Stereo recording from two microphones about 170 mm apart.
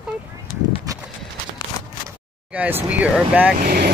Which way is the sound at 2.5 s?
10° right (ahead or behind).